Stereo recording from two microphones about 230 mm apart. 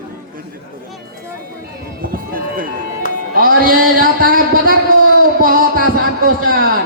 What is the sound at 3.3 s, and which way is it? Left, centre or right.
Music, right.